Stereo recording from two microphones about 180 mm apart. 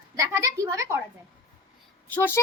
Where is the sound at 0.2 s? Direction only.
20° right (ahead or behind).